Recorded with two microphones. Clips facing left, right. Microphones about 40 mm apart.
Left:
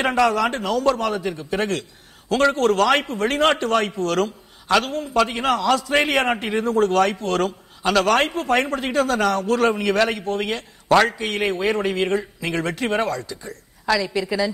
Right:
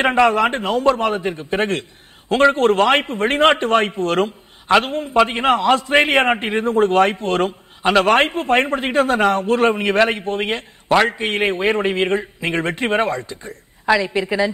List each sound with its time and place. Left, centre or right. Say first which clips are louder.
0.0 s a man's voice: right 4 dB; right